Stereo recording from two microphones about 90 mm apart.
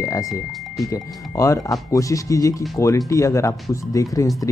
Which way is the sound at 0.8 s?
35° left (ahead or behind).